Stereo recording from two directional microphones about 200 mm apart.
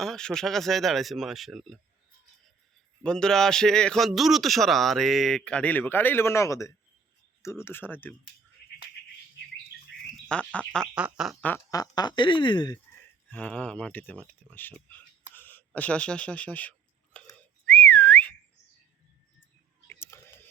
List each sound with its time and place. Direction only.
0.0 s a man's voice: 5° left (ahead or behind)
3.0 s a man's voice: 5° left (ahead or behind)
10.2 s a man's voice: 5° left (ahead or behind); by 12.8 s 20° left (ahead or behind)
13.3 s speech: 5° left (ahead or behind)
17.3 s whistling: 5° left (ahead or behind)
19.9 s a sound: 10° left (ahead or behind)